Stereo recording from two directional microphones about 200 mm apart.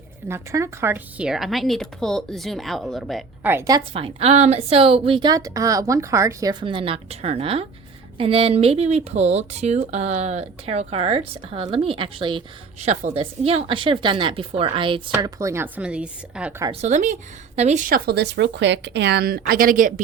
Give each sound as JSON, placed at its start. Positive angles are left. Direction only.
{"t": 0.3, "sound": "speech", "side_deg": -15}
{"t": 3.5, "sound": "a woman's voice", "side_deg": -15}
{"t": 3.9, "sound": "a woman's voice", "side_deg": -30}
{"t": 15.1, "sound": "a woman's voice", "side_deg": -15}
{"t": 16.8, "sound": "speech", "side_deg": -35}